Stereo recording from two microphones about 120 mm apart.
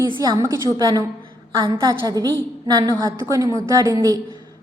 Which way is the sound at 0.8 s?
35° right (ahead or behind).